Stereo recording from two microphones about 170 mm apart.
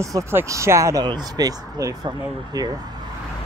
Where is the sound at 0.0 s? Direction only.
15° right (ahead or behind).